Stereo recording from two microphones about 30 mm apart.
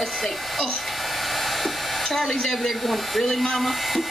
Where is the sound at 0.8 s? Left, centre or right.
Centre.